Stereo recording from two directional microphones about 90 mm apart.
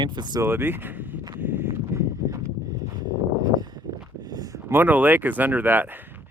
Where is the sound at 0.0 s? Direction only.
55° right (ahead or behind).